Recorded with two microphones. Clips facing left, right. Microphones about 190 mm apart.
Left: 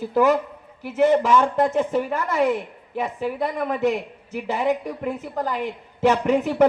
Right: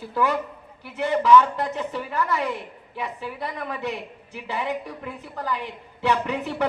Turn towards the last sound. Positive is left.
turn(degrees=45)  # may be behind; listen again after turning